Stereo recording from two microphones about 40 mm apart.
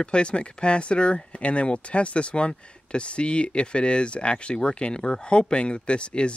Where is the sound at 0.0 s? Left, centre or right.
Left.